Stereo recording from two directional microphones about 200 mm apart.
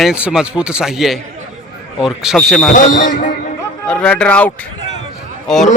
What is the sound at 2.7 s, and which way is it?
Speech, 40° left (ahead or behind).